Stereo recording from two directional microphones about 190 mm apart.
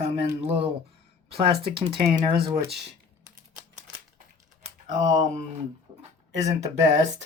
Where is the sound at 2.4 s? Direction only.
20° right (ahead or behind).